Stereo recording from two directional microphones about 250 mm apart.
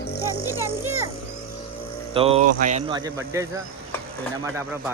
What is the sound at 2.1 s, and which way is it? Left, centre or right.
Speech, right.